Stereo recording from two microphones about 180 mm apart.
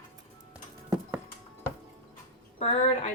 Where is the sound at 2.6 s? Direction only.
40° left (ahead or behind).